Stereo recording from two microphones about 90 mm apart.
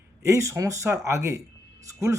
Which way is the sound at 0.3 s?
35° right (ahead or behind).